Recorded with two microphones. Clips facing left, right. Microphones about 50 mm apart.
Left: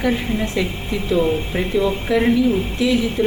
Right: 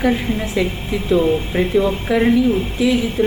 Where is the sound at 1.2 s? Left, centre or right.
Centre.